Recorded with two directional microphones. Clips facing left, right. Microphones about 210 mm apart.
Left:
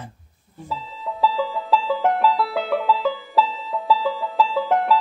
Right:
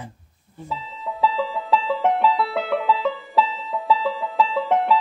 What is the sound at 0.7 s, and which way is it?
Music, centre (ahead or behind).